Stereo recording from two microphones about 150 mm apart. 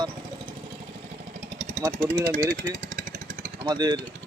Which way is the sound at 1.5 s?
55° right (ahead or behind).